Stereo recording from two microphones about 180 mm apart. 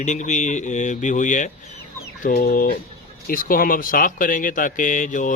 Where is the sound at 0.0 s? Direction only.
40° left (ahead or behind).